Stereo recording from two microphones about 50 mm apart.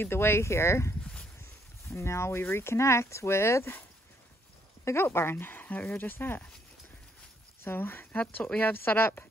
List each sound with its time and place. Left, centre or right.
0.0 s speech: left
1.0 s a sound: centre
1.4 s a sound: left
2.5 s speech: left
4.9 s speech: left
7.6 s speech: left